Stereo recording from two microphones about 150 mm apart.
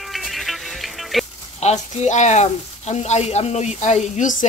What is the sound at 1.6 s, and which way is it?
Speech, 50° left (ahead or behind).